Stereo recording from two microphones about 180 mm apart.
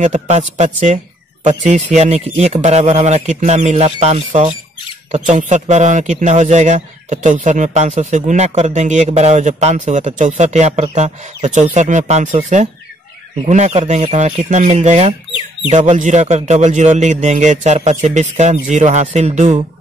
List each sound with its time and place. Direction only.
0.0 s speech: 40° right (ahead or behind)